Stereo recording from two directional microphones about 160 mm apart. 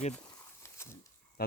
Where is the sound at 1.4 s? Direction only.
75° left (ahead or behind).